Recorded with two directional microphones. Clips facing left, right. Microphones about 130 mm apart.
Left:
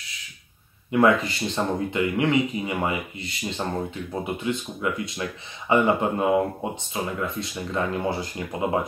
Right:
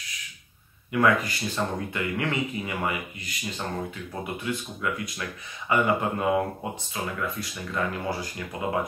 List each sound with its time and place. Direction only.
0.9 s speech: 25° left (ahead or behind)